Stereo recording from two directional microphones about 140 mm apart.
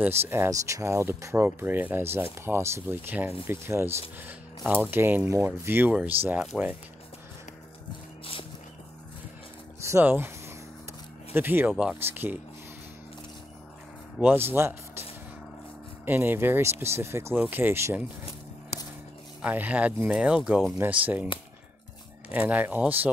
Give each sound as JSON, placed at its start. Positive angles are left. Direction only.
{"t": 0.0, "sound": "speech", "side_deg": -15}
{"t": 9.8, "sound": "speech", "side_deg": -20}
{"t": 11.3, "sound": "speech", "side_deg": -15}
{"t": 11.7, "sound": "speech", "side_deg": 0}
{"t": 12.0, "sound": "speech", "side_deg": -15}
{"t": 14.2, "sound": "speech", "side_deg": -15}
{"t": 16.1, "sound": "speech", "side_deg": -15}
{"t": 19.4, "sound": "speech", "side_deg": -10}
{"t": 22.5, "sound": "speech", "side_deg": -10}